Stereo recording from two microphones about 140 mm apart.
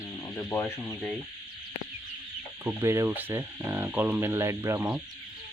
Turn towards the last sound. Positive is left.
turn(degrees=-15)  # may be behind; listen again after turning